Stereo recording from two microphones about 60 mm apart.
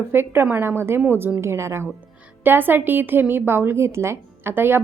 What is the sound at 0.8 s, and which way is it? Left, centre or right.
A woman's voice, right.